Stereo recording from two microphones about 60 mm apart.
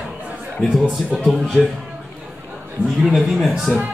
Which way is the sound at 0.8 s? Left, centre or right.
Centre.